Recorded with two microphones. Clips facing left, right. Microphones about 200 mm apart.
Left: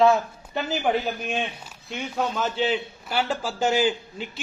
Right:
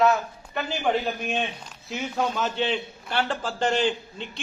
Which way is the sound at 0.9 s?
5° left (ahead or behind).